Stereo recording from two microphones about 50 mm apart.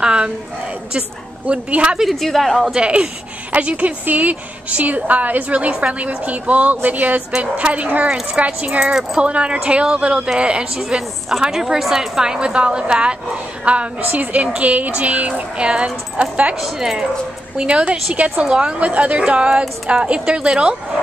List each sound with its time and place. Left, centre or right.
0.0 s a sound: centre
0.9 s speech: right
2.0 s a woman's voice: centre
2.7 s a woman's voice: right
8.8 s a woman's voice: centre
9.2 s a woman's voice: right
16.6 s a woman's voice: centre
17.6 s speech: right